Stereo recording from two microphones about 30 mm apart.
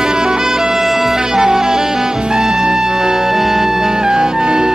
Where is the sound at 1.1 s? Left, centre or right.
Centre.